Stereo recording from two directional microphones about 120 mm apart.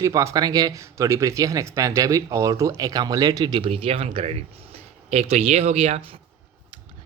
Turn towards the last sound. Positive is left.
turn(degrees=-60)  # may be behind; listen again after turning